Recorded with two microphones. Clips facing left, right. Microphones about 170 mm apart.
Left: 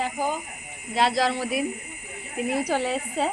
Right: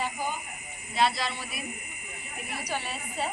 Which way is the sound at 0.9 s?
90° left.